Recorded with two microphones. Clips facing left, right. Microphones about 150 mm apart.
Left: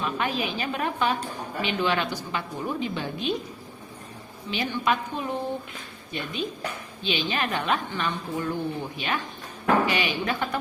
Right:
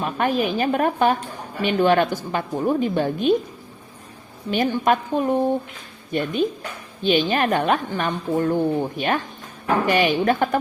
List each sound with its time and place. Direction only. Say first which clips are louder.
0.0 s a woman's voice: right 6 dB; 50° right (ahead or behind)
4.5 s a woman's voice: right 7 dB; 50° right (ahead or behind)